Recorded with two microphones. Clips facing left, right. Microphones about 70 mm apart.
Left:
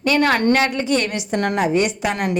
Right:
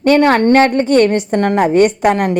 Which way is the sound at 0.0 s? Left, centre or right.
Right.